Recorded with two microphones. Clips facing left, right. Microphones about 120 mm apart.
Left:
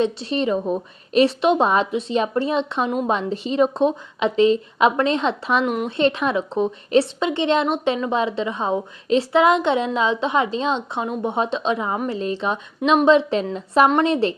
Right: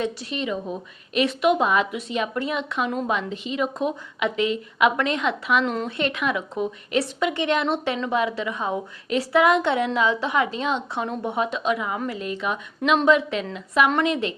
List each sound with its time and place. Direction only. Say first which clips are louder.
0.0 s a woman's voice: left 6 dB; 30° left (ahead or behind)
5.6 s speech: left 3 dB; 15° left (ahead or behind)
6.0 s a woman's voice: left 8 dB; 30° left (ahead or behind)